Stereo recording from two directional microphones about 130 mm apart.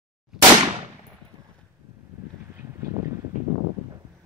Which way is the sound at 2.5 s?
20° right (ahead or behind).